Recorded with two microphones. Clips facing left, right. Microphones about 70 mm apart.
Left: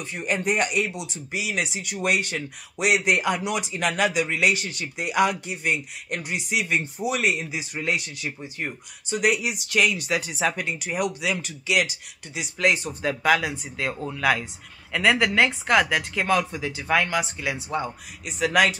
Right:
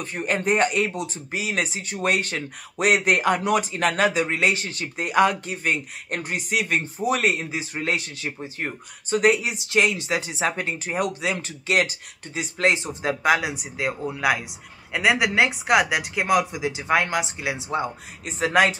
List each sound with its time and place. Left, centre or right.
0.0 s speech: right
12.7 s speech: right